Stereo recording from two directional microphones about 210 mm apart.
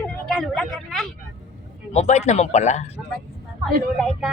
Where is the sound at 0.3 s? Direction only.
Centre (ahead or behind).